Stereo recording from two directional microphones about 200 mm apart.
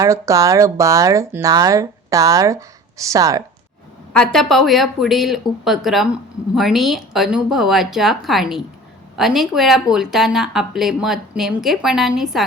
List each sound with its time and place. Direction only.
0.0 s speech: 15° right (ahead or behind)
4.1 s a woman's voice: 5° left (ahead or behind)